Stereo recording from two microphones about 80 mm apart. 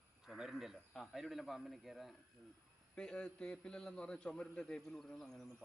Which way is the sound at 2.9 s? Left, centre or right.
Centre.